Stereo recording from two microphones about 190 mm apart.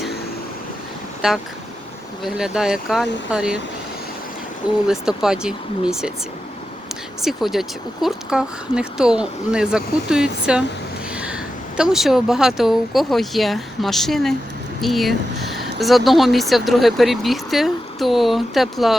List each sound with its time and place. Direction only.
1.2 s speech: 5° right (ahead or behind)
4.9 s speech: 5° right (ahead or behind)
7.2 s speech: centre (ahead or behind)
11.8 s speech: centre (ahead or behind)